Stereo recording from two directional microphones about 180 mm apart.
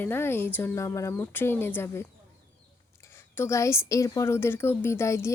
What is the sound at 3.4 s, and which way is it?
Speech, 15° left (ahead or behind).